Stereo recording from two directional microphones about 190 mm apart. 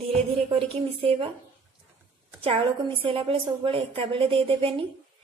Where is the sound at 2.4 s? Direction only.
30° right (ahead or behind).